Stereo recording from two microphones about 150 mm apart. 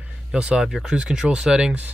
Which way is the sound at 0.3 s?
5° right (ahead or behind).